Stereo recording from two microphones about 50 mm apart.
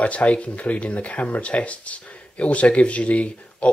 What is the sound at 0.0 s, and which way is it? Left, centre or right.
Speech, left.